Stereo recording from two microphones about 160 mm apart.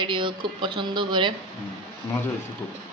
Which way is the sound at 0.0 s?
30° right (ahead or behind).